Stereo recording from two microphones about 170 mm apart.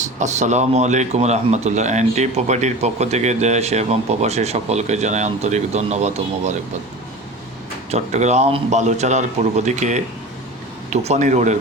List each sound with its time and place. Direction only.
0.0 s speech: 45° right (ahead or behind)
7.9 s a man's voice: 40° right (ahead or behind)